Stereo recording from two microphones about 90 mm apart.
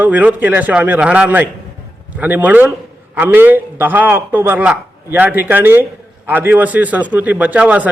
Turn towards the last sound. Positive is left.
turn(degrees=-15)  # may be behind; listen again after turning